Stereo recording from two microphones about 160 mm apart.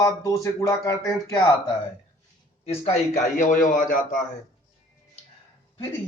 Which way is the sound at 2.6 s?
40° left (ahead or behind).